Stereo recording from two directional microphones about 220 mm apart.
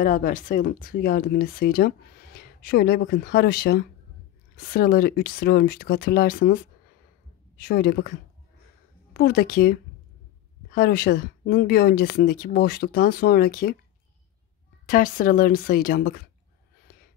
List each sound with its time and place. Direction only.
0.0 s speech: 40° left (ahead or behind)
14.9 s speech: 40° left (ahead or behind)